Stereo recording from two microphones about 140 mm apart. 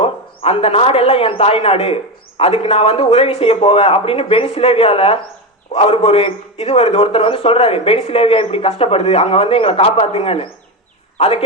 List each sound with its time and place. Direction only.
0.0 s a man's voice: 45° left (ahead or behind)